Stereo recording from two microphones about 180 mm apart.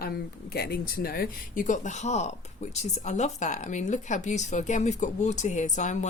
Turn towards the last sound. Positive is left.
turn(degrees=45)  # may be behind; listen again after turning